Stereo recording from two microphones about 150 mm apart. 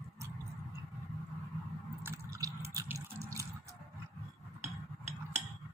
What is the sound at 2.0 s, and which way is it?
Drip, 15° right (ahead or behind).